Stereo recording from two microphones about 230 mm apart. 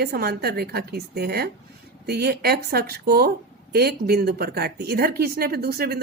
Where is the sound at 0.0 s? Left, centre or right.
Right.